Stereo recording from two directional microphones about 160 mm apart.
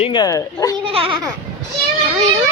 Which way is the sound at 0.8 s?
35° right (ahead or behind).